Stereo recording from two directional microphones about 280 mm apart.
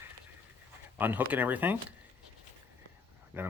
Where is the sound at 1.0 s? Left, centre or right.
Centre.